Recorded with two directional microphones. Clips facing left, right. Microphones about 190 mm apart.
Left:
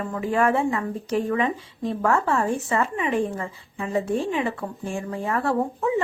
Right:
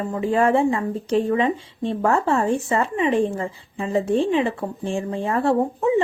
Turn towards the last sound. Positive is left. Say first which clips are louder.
# right 4 dB
turn(degrees=-30)  # may be behind; listen again after turning